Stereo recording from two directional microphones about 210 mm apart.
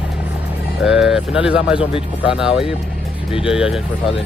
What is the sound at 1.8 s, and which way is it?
Speech, 25° left (ahead or behind).